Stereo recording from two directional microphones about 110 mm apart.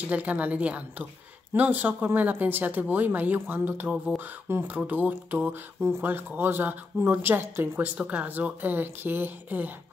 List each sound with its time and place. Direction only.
0.1 s speech: 15° right (ahead or behind)